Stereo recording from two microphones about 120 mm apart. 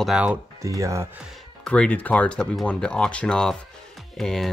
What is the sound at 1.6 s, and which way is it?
Speech, 10° left (ahead or behind).